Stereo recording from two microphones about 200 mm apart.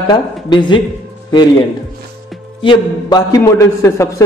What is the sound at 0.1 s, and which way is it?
Speech, 20° left (ahead or behind).